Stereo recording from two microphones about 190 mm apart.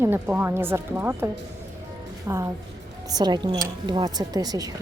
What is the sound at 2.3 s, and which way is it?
Speech, 15° right (ahead or behind).